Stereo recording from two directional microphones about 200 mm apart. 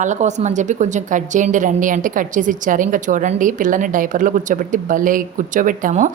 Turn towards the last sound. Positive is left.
turn(degrees=-40)  # may be behind; listen again after turning